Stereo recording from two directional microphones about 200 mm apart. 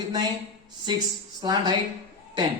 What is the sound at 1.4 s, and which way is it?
Speech, 20° right (ahead or behind).